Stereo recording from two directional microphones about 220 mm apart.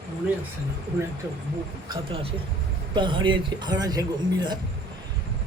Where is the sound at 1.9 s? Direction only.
25° right (ahead or behind).